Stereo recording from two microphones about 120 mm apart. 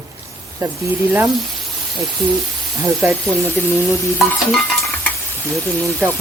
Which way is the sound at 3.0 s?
20° right (ahead or behind).